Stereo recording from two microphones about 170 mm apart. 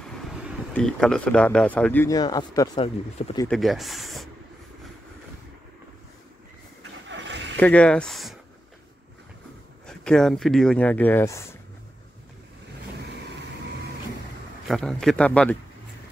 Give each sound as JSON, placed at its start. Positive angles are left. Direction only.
{"t": 0.0, "sound": "a sound", "side_deg": -5}
{"t": 0.7, "sound": "speech", "side_deg": 5}
{"t": 3.4, "sound": "speech", "side_deg": 0}
{"t": 7.1, "sound": "a sound", "side_deg": -90}
{"t": 7.5, "sound": "speech", "side_deg": 10}
{"t": 9.8, "sound": "speech", "side_deg": 5}
{"t": 14.7, "sound": "speech", "side_deg": 5}